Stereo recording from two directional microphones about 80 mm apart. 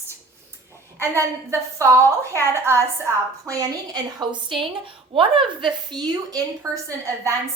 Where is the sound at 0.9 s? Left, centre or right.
Right.